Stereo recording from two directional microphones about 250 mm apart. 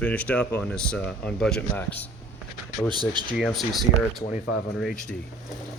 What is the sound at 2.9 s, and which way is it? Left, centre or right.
Speech, centre.